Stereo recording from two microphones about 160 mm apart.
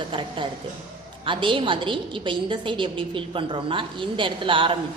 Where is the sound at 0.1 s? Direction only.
30° right (ahead or behind).